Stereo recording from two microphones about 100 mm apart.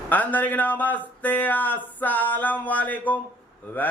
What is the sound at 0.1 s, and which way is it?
Speech, 15° left (ahead or behind).